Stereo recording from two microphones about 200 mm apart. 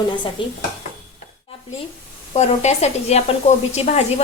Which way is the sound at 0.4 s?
25° left (ahead or behind).